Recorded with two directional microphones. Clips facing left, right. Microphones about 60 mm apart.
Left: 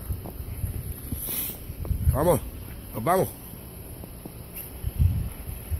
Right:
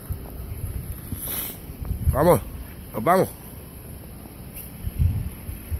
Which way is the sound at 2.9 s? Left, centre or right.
Right.